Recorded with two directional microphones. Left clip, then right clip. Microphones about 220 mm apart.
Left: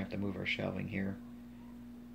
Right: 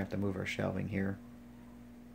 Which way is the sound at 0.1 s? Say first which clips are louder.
Even; 30° right (ahead or behind).